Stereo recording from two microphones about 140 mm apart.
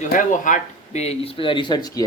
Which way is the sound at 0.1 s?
65° left (ahead or behind).